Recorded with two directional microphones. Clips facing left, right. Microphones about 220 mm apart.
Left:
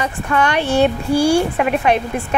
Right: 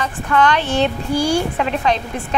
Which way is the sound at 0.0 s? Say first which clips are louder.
Right 1 dB; 10° left (ahead or behind).